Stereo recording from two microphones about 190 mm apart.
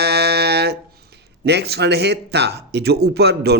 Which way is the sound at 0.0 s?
60° right (ahead or behind).